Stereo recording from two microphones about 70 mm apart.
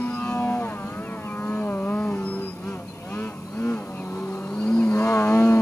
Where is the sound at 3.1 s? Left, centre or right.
Left.